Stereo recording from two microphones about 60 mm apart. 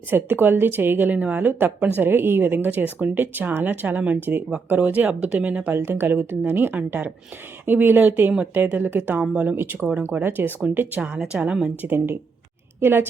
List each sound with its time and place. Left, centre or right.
0.1 s speech: right
5.7 s speech: right
9.2 s speech: centre
9.6 s speech: right
11.8 s speech: right